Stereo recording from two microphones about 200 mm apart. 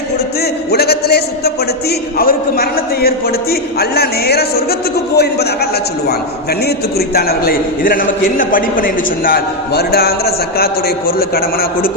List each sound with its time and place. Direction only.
0.7 s a man's voice: 50° left (ahead or behind)
6.7 s a man's voice: 50° left (ahead or behind)